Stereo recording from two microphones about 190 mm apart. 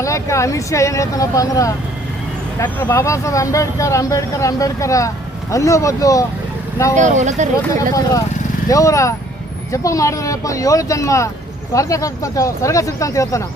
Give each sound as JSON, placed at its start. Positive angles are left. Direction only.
{"t": 0.0, "sound": "speech", "side_deg": 15}
{"t": 7.0, "sound": "speech", "side_deg": -40}
{"t": 7.7, "sound": "speech", "side_deg": 20}